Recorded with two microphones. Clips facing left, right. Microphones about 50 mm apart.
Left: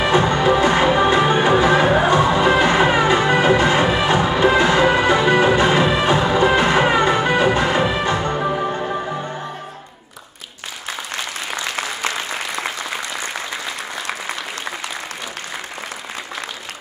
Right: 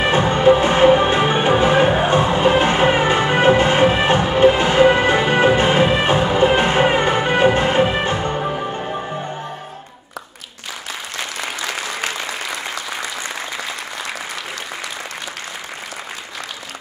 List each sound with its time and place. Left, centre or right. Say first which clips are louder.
0.0 s music: right 1 dB; right
8.4 s music: left 2 dB; centre